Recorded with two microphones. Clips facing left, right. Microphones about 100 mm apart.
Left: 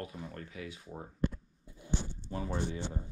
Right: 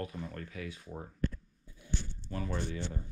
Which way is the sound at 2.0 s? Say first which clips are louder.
Left 1 dB; 15° left (ahead or behind).